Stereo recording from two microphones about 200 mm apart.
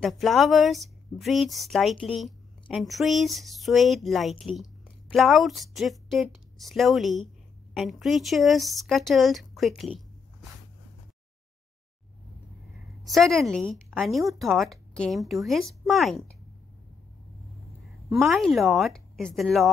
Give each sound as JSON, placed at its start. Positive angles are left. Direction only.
{"t": 0.0, "sound": "speech", "side_deg": 0}
{"t": 13.0, "sound": "speech", "side_deg": 0}
{"t": 18.1, "sound": "speech", "side_deg": 0}